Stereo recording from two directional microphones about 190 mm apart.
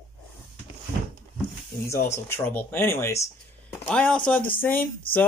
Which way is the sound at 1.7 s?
15° left (ahead or behind).